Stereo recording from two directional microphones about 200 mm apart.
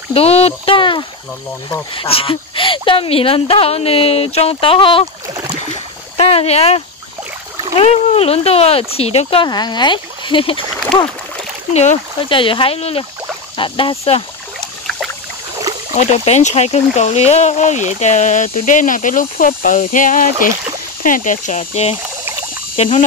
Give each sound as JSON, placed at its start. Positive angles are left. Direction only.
{"t": 0.1, "sound": "speech", "side_deg": 30}
{"t": 6.1, "sound": "speech", "side_deg": 30}
{"t": 15.9, "sound": "speech", "side_deg": 35}